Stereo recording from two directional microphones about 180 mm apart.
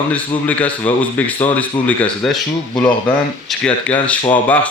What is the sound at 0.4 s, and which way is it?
Speech, 10° left (ahead or behind).